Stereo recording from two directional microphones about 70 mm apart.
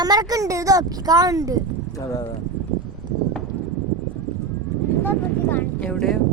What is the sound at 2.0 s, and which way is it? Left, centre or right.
Speech, left.